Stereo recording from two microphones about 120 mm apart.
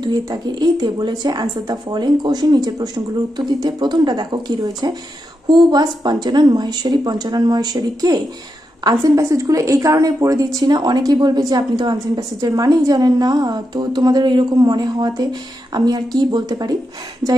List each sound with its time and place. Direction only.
0.0 s a woman's voice: 35° right (ahead or behind)
17.2 s speech: 20° right (ahead or behind)